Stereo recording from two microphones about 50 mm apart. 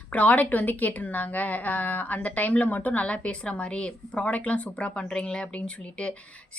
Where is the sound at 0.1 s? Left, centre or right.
Left.